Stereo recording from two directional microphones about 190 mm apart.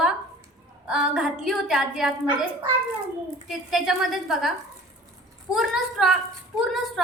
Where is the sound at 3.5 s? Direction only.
Centre (ahead or behind).